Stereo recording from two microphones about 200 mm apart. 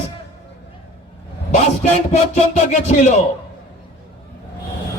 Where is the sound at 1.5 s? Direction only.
35° left (ahead or behind).